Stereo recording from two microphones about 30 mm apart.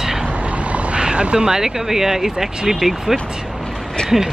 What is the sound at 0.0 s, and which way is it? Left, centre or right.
Vehicle, centre.